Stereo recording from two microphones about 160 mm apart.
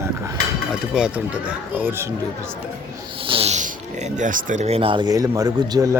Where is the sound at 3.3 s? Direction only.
40° right (ahead or behind).